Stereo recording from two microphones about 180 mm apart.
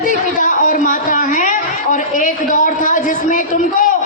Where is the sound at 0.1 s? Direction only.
45° left (ahead or behind).